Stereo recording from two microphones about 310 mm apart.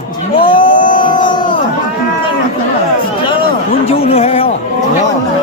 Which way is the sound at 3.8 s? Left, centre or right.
Centre.